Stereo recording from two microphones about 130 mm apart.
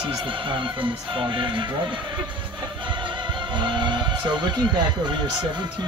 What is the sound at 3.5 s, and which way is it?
Speech, 35° right (ahead or behind).